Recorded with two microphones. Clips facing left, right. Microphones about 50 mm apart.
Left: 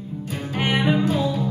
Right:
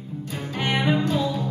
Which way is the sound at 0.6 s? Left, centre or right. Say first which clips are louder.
Left 2 dB; centre.